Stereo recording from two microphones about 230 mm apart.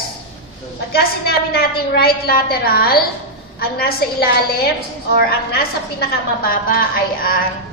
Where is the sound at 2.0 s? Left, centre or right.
Left.